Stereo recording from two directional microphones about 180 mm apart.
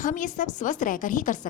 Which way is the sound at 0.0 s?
45° left (ahead or behind).